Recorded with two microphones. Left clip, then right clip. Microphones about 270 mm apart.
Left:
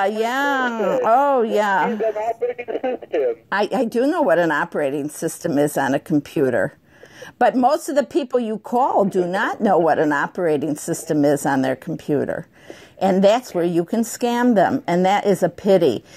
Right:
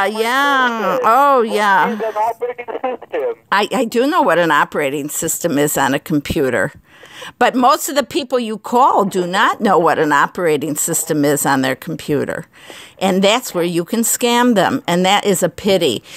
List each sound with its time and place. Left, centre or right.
0.2 s speech: right
1.9 s speech: right
3.4 s speech: right